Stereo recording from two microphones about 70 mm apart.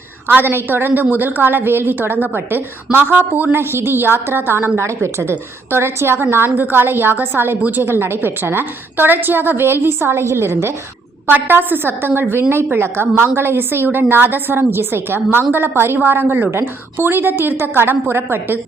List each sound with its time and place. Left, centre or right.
0.3 s a woman's voice: right